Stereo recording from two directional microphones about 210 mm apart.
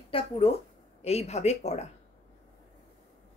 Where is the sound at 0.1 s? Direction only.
25° left (ahead or behind).